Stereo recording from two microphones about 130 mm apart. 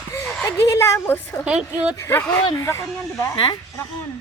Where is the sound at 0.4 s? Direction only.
20° left (ahead or behind).